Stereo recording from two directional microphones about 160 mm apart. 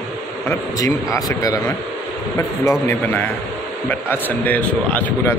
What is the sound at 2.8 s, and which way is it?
Speech, 10° left (ahead or behind).